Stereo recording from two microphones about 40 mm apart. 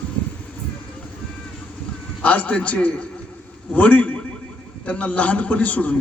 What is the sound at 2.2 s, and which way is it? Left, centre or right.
Speech, left.